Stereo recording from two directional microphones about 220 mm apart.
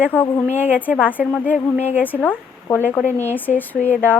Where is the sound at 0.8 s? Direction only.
5° right (ahead or behind).